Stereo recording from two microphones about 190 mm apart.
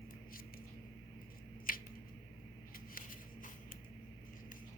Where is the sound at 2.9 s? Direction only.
45° left (ahead or behind).